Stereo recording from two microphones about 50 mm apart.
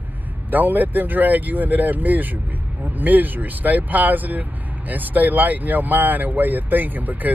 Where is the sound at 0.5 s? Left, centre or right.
Right.